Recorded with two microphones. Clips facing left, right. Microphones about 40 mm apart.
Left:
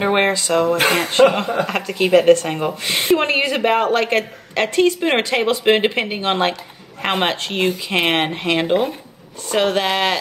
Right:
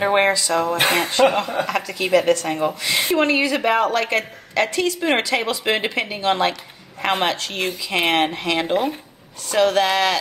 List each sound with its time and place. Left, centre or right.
0.0 s speech: left